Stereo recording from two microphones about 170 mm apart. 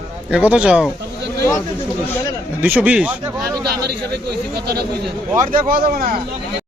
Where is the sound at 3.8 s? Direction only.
70° right (ahead or behind).